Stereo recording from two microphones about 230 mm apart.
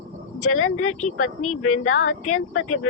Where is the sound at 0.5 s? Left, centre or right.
Left.